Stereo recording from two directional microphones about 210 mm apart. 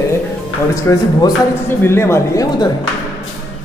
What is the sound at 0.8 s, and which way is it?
Speech, 10° left (ahead or behind).